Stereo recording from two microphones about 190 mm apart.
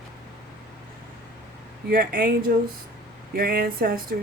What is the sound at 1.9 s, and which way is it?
Speech, 50° right (ahead or behind).